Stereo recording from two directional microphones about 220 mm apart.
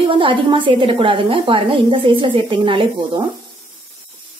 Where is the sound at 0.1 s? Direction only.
25° right (ahead or behind).